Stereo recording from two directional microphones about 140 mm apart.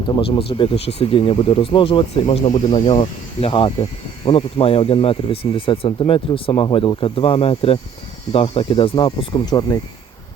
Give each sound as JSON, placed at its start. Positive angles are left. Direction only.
{"t": 0.2, "sound": "speech", "side_deg": 40}